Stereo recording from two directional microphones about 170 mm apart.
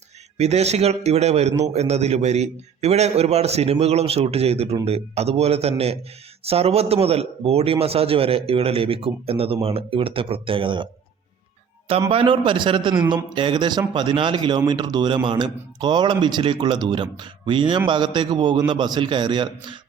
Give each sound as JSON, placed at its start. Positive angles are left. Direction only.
{"t": 0.3, "sound": "a man's voice", "side_deg": -40}
{"t": 12.1, "sound": "a man's voice", "side_deg": -30}